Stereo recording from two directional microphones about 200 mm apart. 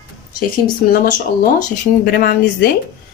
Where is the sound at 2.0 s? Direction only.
50° left (ahead or behind).